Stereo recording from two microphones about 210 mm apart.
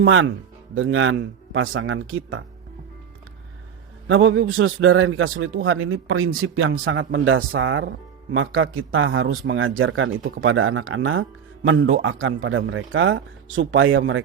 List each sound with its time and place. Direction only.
0.0 s a man's voice: 70° right (ahead or behind)
4.1 s a man's voice: 70° right (ahead or behind)